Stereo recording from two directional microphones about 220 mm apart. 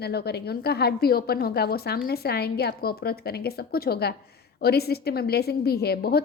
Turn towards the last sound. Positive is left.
turn(degrees=45)  # may be behind; listen again after turning